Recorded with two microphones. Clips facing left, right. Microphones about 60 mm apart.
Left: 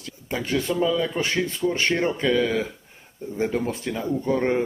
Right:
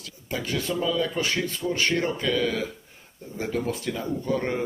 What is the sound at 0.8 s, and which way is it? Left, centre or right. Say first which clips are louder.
Speech: left 2 dB; centre.